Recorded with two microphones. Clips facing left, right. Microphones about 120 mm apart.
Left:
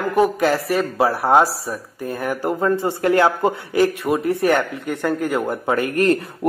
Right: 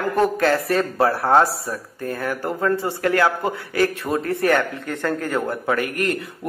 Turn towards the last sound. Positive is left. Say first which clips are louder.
# left 4 dB
turn(degrees=30)  # may be behind; listen again after turning